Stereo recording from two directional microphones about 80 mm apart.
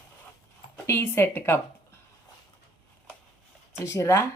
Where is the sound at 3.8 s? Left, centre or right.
Left.